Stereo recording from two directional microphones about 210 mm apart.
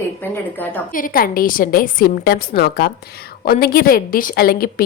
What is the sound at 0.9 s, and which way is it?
A woman's voice, 40° left (ahead or behind).